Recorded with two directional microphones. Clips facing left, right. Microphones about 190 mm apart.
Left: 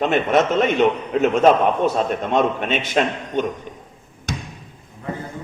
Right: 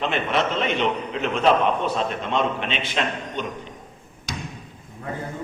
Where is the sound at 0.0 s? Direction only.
45° left (ahead or behind).